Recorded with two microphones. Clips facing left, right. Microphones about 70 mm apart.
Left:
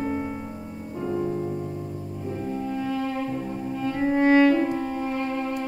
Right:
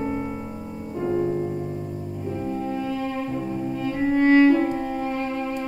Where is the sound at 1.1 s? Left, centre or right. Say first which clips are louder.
Right 3 dB; centre.